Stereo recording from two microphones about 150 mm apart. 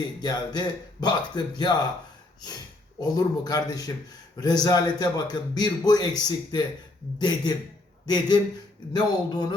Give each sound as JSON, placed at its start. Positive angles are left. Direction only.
{"t": 0.2, "sound": "a man's voice", "side_deg": 30}
{"t": 3.0, "sound": "a man's voice", "side_deg": 25}